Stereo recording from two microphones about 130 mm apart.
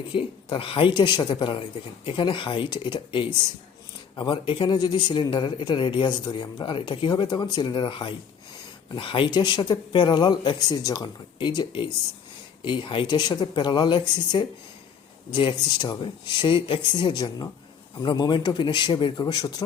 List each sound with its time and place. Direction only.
0.1 s speech: 40° left (ahead or behind)
15.3 s speech: 40° left (ahead or behind)